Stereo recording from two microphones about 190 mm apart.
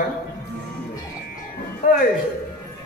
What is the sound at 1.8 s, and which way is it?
Speech, 45° left (ahead or behind).